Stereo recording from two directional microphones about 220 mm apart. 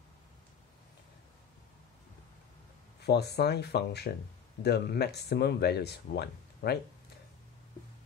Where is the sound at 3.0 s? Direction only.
45° left (ahead or behind).